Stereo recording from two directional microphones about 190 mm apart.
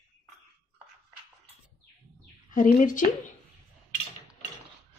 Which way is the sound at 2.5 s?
45° left (ahead or behind).